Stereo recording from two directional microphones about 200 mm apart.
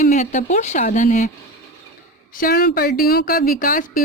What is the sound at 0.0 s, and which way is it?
Speech, 35° left (ahead or behind).